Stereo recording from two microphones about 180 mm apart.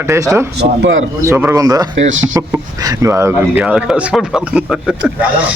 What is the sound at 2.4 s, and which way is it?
A man's voice, 20° right (ahead or behind).